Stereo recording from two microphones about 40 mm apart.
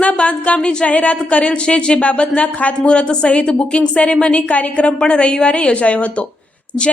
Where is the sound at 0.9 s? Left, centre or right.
Left.